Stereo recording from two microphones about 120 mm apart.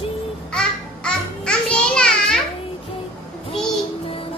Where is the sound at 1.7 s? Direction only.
5° left (ahead or behind).